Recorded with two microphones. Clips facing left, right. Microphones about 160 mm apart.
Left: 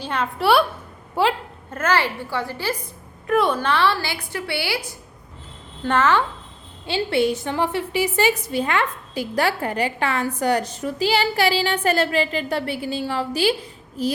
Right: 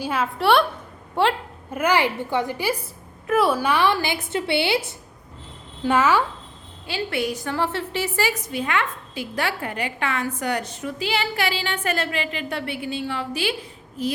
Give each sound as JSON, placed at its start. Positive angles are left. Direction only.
{"t": 0.0, "sound": "a woman's voice", "side_deg": -5}
{"t": 1.7, "sound": "a woman's voice", "side_deg": -15}
{"t": 5.8, "sound": "a woman's voice", "side_deg": -10}
{"t": 6.8, "sound": "a woman's voice", "side_deg": 30}
{"t": 8.5, "sound": "a woman's voice", "side_deg": 35}